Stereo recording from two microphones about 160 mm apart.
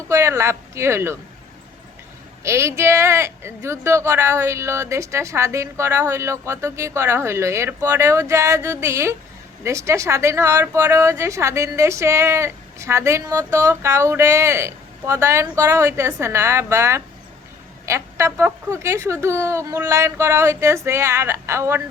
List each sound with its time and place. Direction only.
0.1 s a woman's voice: 15° right (ahead or behind)
2.4 s a woman's voice: 15° right (ahead or behind)